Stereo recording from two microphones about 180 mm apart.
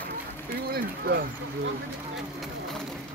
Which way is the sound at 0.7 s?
60° right (ahead or behind).